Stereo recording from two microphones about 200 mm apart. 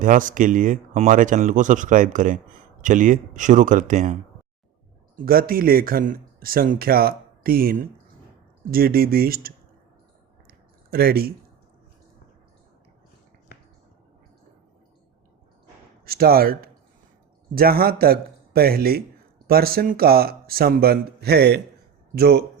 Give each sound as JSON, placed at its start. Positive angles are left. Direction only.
{"t": 0.0, "sound": "speech", "side_deg": -40}
{"t": 10.9, "sound": "speech", "side_deg": -50}
{"t": 16.0, "sound": "speech", "side_deg": -50}